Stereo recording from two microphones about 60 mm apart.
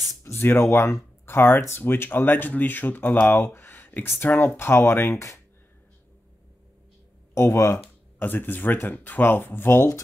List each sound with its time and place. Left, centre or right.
0.2 s speech: left
3.1 s speech: centre
3.3 s speech: left
7.3 s speech: left
8.2 s speech: left